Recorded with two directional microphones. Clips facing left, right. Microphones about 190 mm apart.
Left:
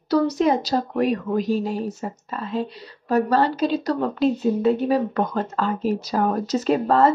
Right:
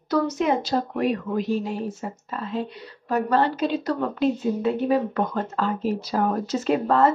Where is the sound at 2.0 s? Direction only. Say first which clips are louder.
Left 2 dB; 40° left (ahead or behind).